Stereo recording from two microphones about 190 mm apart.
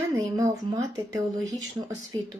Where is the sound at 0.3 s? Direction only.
20° right (ahead or behind).